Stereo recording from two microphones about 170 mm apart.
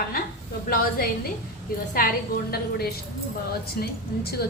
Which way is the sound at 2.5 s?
65° left (ahead or behind).